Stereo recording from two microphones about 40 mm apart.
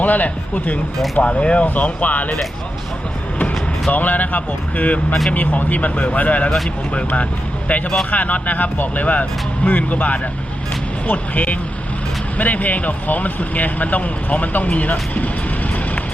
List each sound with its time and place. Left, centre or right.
0.0 s speech: left
1.1 s speech: left
1.6 s speech: left
3.9 s speech: left